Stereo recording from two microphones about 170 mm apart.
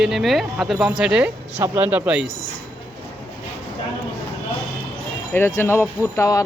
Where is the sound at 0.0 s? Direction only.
Centre (ahead or behind).